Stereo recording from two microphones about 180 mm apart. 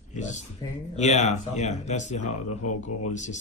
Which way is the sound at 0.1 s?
40° left (ahead or behind).